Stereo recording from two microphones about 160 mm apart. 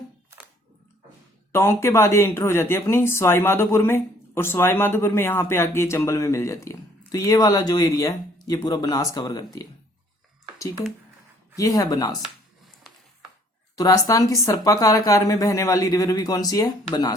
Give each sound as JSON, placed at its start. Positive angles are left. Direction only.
{"t": 1.5, "sound": "speech", "side_deg": 15}
{"t": 11.5, "sound": "speech", "side_deg": 20}
{"t": 13.7, "sound": "speech", "side_deg": 20}